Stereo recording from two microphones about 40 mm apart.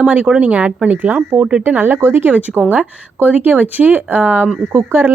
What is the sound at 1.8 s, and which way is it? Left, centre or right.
Speech, right.